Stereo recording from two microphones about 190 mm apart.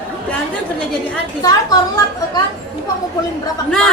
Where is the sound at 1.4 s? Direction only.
20° left (ahead or behind).